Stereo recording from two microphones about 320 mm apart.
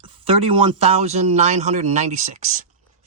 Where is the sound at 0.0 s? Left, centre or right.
Centre.